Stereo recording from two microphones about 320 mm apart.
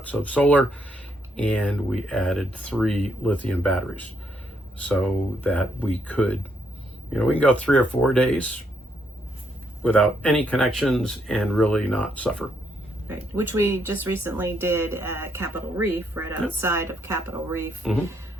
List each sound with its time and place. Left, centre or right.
0.0 s speech: centre
9.8 s speech: centre
13.1 s speech: centre